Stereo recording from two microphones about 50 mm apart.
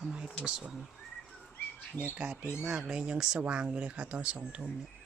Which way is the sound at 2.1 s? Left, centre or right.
Right.